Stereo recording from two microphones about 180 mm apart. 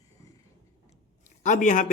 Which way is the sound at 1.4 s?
45° left (ahead or behind).